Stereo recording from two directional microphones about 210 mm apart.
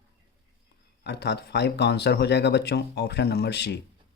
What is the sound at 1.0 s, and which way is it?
Speech, 50° left (ahead or behind).